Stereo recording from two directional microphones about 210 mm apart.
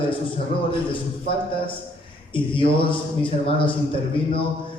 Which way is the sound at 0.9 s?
25° left (ahead or behind).